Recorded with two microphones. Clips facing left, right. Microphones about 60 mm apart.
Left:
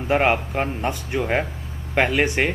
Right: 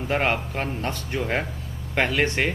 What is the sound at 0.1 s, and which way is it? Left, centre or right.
Speech, centre.